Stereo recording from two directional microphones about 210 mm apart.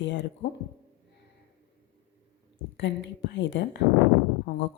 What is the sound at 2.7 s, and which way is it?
Speech, 60° left (ahead or behind).